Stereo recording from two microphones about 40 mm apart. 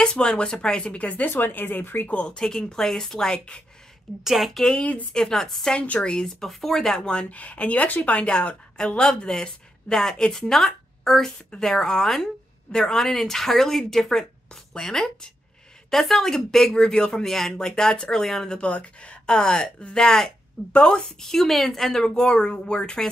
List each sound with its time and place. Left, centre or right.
0.0 s speech: left
0.9 s a woman's voice: left
1.3 s speech: left
2.2 s speech: left
4.2 s a woman's voice: centre
5.1 s speech: centre
5.7 s a woman's voice: left
6.1 s speech: centre
7.2 s a woman's voice: left; by 18.5 s centre
18.5 s speech: left
20.0 s speech: centre
20.7 s speech: left
21.2 s speech: centre
22.1 s speech: centre